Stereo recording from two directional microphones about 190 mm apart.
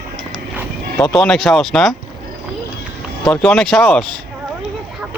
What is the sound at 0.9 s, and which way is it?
Speech, 15° left (ahead or behind).